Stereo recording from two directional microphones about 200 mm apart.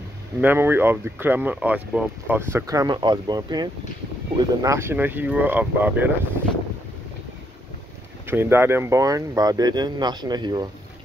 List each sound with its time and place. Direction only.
0.4 s speech: 10° right (ahead or behind)
8.3 s speech: 10° right (ahead or behind)